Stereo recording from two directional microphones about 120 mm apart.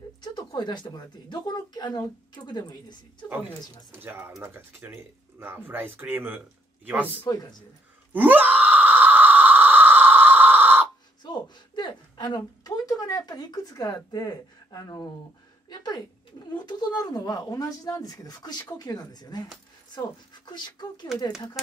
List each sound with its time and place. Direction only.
0.2 s a woman's voice: 35° left (ahead or behind)
3.9 s a man's voice: 20° right (ahead or behind)
7.2 s a woman's voice: 30° left (ahead or behind)
8.1 s a sound: 15° right (ahead or behind)
11.2 s a sound: 35° left (ahead or behind)
16.5 s a woman's voice: 35° left (ahead or behind)